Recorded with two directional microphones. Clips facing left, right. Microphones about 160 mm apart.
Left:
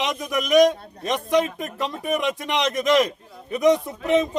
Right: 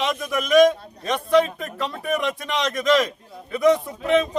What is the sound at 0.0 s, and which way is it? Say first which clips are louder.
A man's voice: right 1 dB; 15° left (ahead or behind).